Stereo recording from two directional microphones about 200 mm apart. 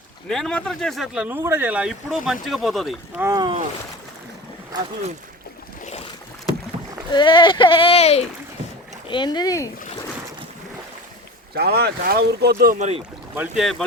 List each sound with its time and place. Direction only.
0.3 s speech: centre (ahead or behind)
3.2 s speech: 20° right (ahead or behind)
7.1 s speech: 25° left (ahead or behind)
11.5 s speech: 50° right (ahead or behind)
13.3 s speech: 5° right (ahead or behind)